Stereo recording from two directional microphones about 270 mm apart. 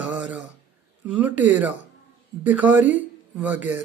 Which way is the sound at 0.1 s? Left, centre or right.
Centre.